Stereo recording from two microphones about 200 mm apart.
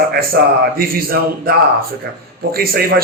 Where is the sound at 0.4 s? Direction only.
50° right (ahead or behind).